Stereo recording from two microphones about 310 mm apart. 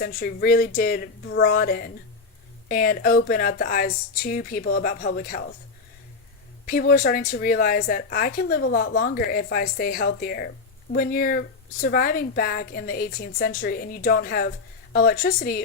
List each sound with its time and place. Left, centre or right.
0.0 s a woman's voice: left
6.7 s a woman's voice: left